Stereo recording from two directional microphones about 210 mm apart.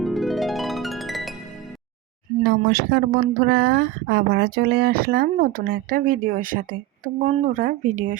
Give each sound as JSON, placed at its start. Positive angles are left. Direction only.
{"t": 0.0, "sound": "harp", "side_deg": 0}
{"t": 2.4, "sound": "speech", "side_deg": -50}